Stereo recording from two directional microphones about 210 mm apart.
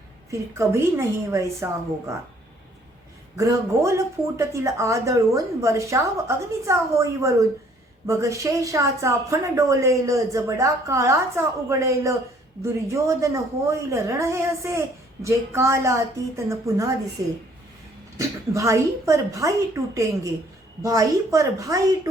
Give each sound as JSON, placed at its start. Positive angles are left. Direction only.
{"t": 0.3, "sound": "a woman's voice", "side_deg": -15}
{"t": 3.3, "sound": "a woman's voice", "side_deg": -15}